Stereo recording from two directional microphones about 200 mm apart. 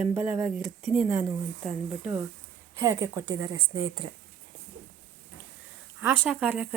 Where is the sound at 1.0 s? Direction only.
15° right (ahead or behind).